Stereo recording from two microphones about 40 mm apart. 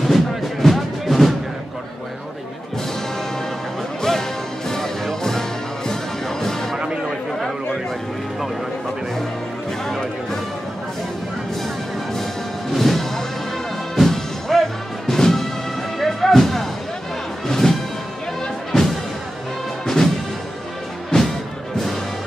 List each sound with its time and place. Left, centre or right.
0.0 s music: centre
4.0 s music: centre
6.8 s a sound: right
9.8 s music: centre
11.6 s music: centre
21.1 s music: left